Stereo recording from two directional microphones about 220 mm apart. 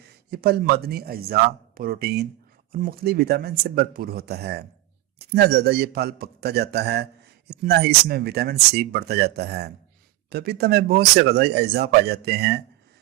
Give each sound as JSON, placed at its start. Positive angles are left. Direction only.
{"t": 0.0, "sound": "a man's voice", "side_deg": -45}